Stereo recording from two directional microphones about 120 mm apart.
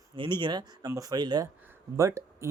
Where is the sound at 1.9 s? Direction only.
25° right (ahead or behind).